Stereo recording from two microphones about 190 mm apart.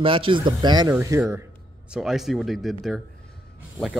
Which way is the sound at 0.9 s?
10° right (ahead or behind).